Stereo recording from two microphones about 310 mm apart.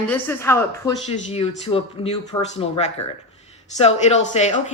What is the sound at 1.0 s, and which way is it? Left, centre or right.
Speech, centre.